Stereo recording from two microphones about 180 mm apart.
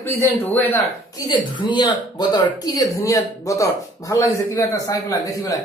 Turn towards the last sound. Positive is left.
turn(degrees=20)  # may be behind; listen again after turning